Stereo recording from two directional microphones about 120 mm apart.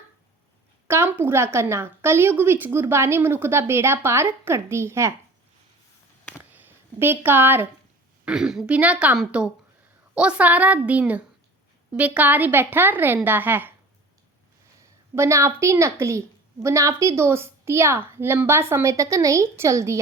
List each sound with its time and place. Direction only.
0.9 s a woman's voice: 20° right (ahead or behind)
6.5 s a sound: 15° right (ahead or behind)
8.2 s a woman's voice: 5° right (ahead or behind)
14.8 s a woman's voice: 25° right (ahead or behind)